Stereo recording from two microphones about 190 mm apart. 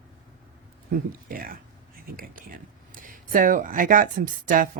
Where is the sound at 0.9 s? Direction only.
50° right (ahead or behind).